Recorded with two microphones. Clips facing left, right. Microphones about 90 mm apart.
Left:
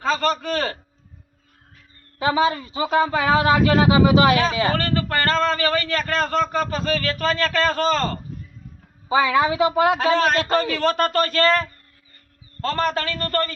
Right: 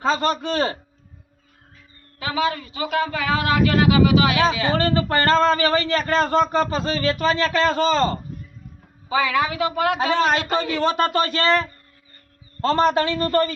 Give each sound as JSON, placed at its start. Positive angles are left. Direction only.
{"t": 0.0, "sound": "speech", "side_deg": -25}
{"t": 2.1, "sound": "a man's voice", "side_deg": 30}
{"t": 4.7, "sound": "speech", "side_deg": -25}
{"t": 9.0, "sound": "a man's voice", "side_deg": 25}
{"t": 10.0, "sound": "speech", "side_deg": -20}
{"t": 12.6, "sound": "speech", "side_deg": -20}